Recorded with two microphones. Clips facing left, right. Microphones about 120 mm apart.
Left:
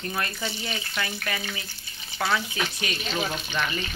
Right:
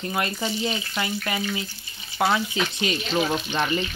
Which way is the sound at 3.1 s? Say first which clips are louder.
Right 6 dB; 40° right (ahead or behind).